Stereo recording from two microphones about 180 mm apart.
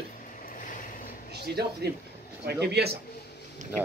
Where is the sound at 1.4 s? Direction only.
65° right (ahead or behind).